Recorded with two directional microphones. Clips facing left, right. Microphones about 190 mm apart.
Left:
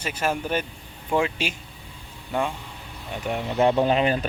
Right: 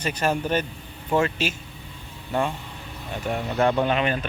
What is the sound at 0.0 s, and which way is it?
Speech, 5° left (ahead or behind).